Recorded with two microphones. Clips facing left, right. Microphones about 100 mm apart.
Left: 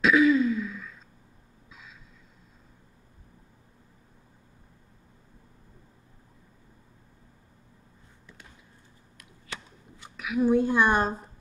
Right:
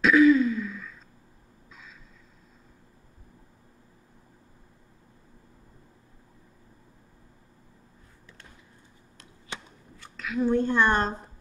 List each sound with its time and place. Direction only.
0.0 s throat clearing: centre (ahead or behind)
1.7 s vehicle: 5° left (ahead or behind)
9.5 s a sound: 20° right (ahead or behind)
9.9 s speech: 15° left (ahead or behind)